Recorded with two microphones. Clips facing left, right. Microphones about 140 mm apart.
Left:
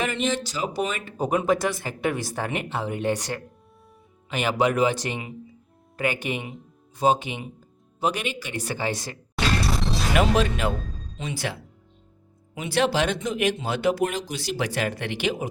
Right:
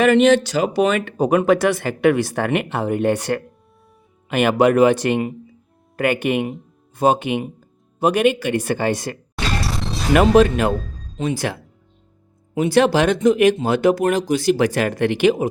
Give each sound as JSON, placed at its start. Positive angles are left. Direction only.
{"t": 0.0, "sound": "speech", "side_deg": -70}
{"t": 9.3, "sound": "music", "side_deg": 0}
{"t": 10.2, "sound": "speech", "side_deg": -50}